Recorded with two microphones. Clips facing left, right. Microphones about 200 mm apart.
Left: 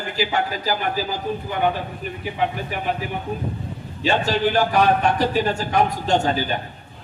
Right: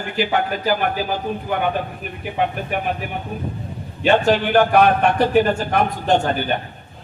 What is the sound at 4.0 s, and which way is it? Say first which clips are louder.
Speech: right 4 dB; 55° right (ahead or behind).